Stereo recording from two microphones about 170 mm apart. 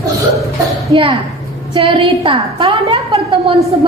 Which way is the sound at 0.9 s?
30° right (ahead or behind).